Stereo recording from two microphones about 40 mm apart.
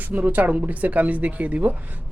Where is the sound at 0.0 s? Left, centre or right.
Right.